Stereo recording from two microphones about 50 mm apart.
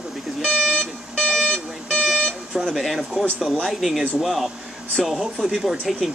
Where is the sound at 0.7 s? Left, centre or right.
Centre.